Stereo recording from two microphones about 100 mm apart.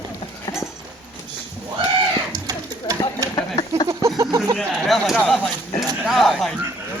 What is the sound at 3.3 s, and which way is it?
Speech, 50° left (ahead or behind).